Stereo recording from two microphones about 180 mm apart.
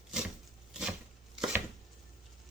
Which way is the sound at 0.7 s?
5° right (ahead or behind).